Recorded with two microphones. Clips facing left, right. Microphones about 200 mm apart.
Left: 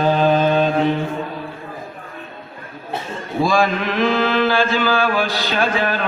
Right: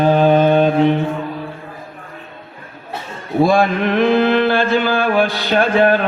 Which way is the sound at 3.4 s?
55° right (ahead or behind).